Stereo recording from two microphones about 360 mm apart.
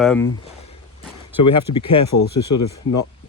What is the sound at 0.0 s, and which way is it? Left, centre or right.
Speech, centre.